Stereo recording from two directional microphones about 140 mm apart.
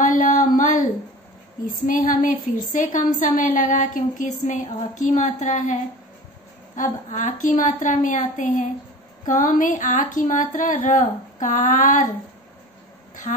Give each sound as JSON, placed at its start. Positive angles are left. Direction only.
{"t": 0.0, "sound": "a sound", "side_deg": 70}
{"t": 1.9, "sound": "speech", "side_deg": 80}
{"t": 9.2, "sound": "speech", "side_deg": 80}